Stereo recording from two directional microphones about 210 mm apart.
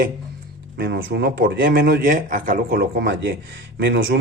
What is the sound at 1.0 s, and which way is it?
A man's voice, 50° right (ahead or behind).